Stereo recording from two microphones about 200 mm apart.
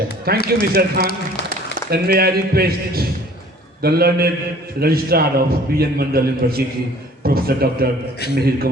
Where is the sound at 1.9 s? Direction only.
50° right (ahead or behind).